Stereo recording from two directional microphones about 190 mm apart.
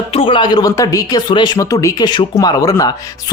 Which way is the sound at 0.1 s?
30° left (ahead or behind).